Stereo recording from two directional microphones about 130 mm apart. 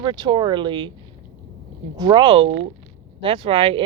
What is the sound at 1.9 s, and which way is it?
Speech, 35° right (ahead or behind).